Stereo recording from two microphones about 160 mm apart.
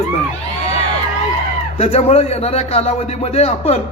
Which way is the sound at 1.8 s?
40° left (ahead or behind).